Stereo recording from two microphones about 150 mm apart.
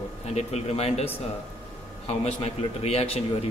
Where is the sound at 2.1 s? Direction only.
45° left (ahead or behind).